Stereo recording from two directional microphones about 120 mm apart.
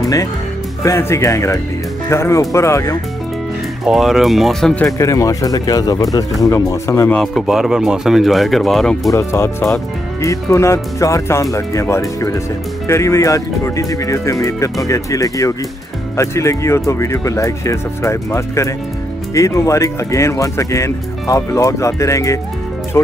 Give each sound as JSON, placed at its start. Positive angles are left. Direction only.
{"t": 0.0, "sound": "speech", "side_deg": 25}
{"t": 3.8, "sound": "speech", "side_deg": -5}
{"t": 4.8, "sound": "speech", "side_deg": 25}
{"t": 7.3, "sound": "speech", "side_deg": -5}
{"t": 9.1, "sound": "speech", "side_deg": 25}